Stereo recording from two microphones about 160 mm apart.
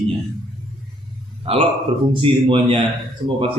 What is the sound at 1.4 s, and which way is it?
A man's voice, 35° right (ahead or behind).